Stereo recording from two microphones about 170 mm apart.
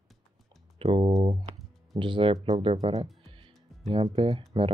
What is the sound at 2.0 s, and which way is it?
Speech, 30° right (ahead or behind).